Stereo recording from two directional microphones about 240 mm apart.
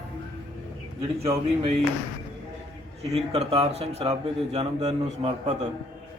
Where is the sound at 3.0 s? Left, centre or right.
Right.